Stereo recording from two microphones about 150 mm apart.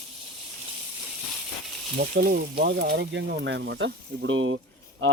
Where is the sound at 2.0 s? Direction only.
90° right.